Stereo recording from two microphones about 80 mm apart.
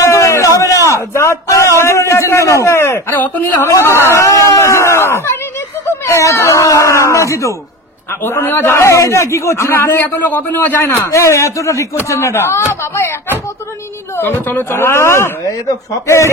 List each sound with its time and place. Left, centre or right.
0.0 s a sound: left
3.2 s a man's voice: left
3.6 s a sound: left
8.1 s a man's voice: left
11.1 s speech: left
14.1 s a man's voice: left
15.4 s speech: left